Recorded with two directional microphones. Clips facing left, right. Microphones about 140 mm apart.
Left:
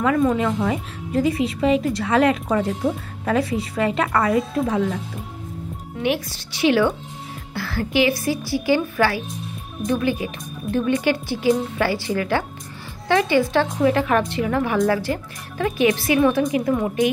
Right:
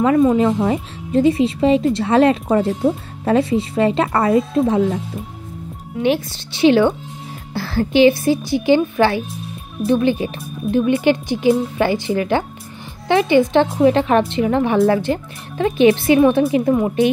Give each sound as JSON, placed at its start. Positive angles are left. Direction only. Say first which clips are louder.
{"t": 0.0, "sound": "speech", "louder": "right 5 dB", "side_deg": -25}
{"t": 6.0, "sound": "speech", "louder": "right 5 dB", "side_deg": -25}
{"t": 10.7, "sound": "speech", "louder": "right 5 dB", "side_deg": -20}